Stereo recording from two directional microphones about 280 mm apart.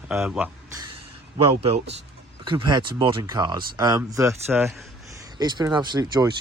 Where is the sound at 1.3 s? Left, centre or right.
Right.